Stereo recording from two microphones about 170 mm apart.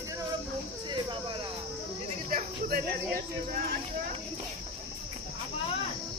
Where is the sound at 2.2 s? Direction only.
60° right (ahead or behind).